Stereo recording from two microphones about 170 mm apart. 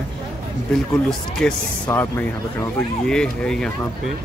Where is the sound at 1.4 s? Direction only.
5° left (ahead or behind).